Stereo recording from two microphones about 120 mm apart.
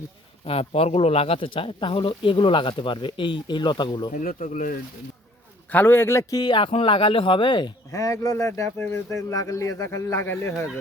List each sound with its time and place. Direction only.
0.4 s speech: 55° left (ahead or behind); by 4.1 s 40° left (ahead or behind)
4.1 s speech: 90° left
5.7 s speech: 20° left (ahead or behind)
6.3 s speech: 40° left (ahead or behind)
7.9 s speech: 30° left (ahead or behind)